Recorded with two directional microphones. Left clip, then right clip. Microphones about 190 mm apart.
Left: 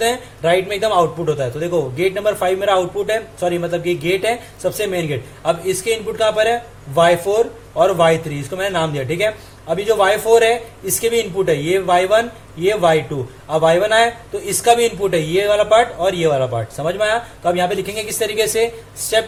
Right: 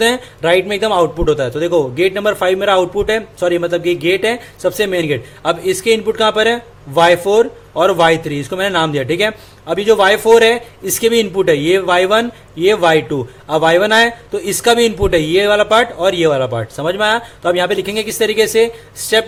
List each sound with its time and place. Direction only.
0.0 s a man's voice: 40° right (ahead or behind)